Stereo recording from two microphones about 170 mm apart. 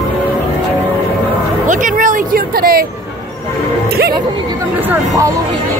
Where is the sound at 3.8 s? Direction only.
65° right (ahead or behind).